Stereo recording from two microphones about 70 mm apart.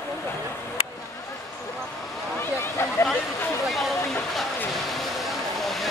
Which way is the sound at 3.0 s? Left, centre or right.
Left.